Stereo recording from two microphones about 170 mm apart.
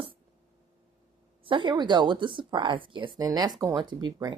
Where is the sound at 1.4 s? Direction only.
30° right (ahead or behind).